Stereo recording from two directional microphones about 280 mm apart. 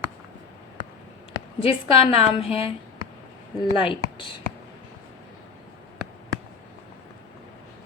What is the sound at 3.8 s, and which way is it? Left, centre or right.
Speech, centre.